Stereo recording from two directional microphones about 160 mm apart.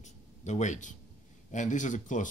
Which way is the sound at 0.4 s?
50° left (ahead or behind).